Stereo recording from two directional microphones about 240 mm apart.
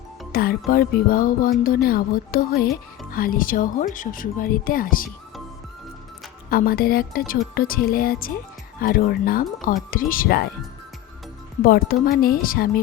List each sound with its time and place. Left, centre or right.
0.3 s speech: left
6.5 s speech: left
11.6 s speech: left